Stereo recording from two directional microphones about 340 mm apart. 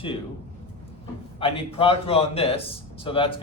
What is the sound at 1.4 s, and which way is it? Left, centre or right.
A man's voice, centre.